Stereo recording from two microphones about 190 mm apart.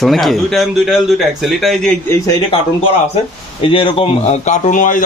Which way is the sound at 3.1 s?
30° left (ahead or behind).